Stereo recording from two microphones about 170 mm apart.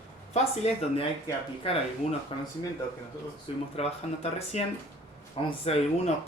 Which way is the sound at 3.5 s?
30° left (ahead or behind).